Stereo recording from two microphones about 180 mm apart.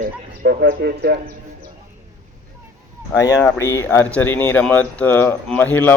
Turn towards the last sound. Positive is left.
turn(degrees=10)  # may be behind; listen again after turning